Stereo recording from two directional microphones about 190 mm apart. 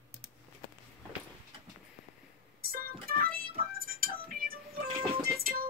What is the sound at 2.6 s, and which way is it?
Music, 50° right (ahead or behind).